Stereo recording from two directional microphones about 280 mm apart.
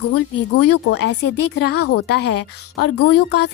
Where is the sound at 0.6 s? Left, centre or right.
Left.